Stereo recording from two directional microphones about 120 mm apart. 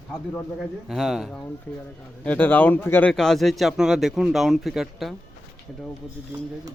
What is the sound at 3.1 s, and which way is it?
Speech, 5° left (ahead or behind).